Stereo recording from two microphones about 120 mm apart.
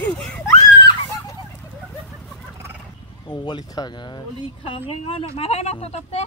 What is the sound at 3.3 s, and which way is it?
Speech, 35° left (ahead or behind).